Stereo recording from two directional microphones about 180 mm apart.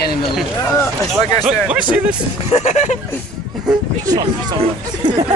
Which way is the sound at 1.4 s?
5° right (ahead or behind).